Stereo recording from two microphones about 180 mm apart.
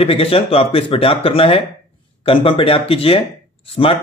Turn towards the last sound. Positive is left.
turn(degrees=30)  # may be behind; listen again after turning